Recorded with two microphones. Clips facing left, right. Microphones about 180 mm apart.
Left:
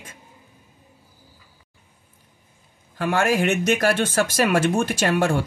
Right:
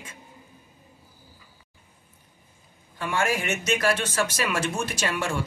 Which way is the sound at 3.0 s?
60° left (ahead or behind).